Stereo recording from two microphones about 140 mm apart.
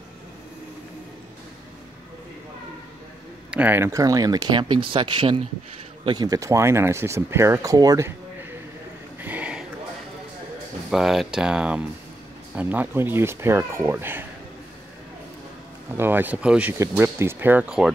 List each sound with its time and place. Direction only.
3.5 s speech: 15° right (ahead or behind)
9.2 s a sound: 10° right (ahead or behind)
10.9 s speech: centre (ahead or behind)
16.0 s speech: 15° right (ahead or behind)
16.7 s speech: 20° right (ahead or behind)